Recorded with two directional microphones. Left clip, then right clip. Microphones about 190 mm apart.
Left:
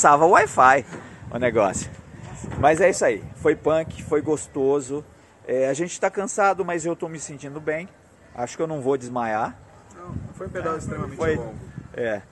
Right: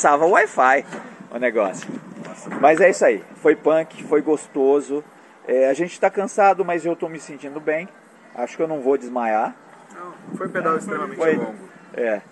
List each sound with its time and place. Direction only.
0.0 s speech: 35° left (ahead or behind)
2.6 s a man's voice: 10° left (ahead or behind)